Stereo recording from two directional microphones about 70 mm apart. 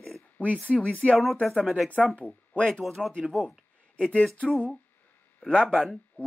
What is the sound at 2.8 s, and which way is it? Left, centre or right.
Speech, centre.